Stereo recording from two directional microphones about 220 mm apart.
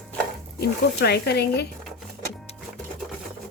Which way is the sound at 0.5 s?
45° left (ahead or behind).